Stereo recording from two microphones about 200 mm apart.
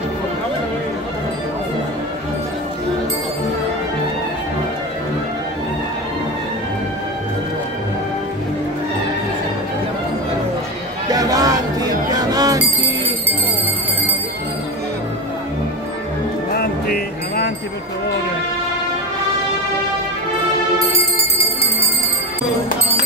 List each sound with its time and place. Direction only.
11.1 s a sound: 20° right (ahead or behind)
12.1 s music: 20° right (ahead or behind)
16.5 s music: 50° left (ahead or behind)